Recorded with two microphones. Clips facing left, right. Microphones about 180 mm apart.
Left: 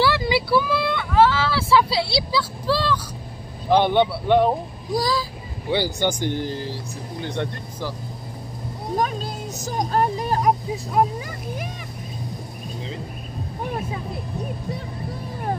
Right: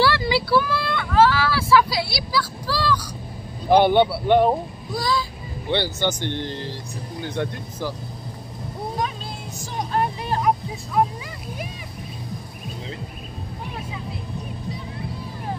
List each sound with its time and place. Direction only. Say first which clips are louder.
0.0 s a sound: even; 15° left (ahead or behind)
3.6 s speech: right 2 dB; 10° right (ahead or behind)
4.9 s speech: left 2 dB; 40° left (ahead or behind)
5.7 s speech: left 1 dB; 10° left (ahead or behind)
7.3 s speech: right 3 dB; 10° right (ahead or behind)
8.9 s vehicle: left 7 dB; 45° left (ahead or behind)
13.7 s speech: left 7 dB; 45° left (ahead or behind)